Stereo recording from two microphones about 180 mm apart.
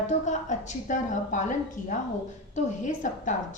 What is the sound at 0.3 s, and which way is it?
A woman's voice, 40° left (ahead or behind).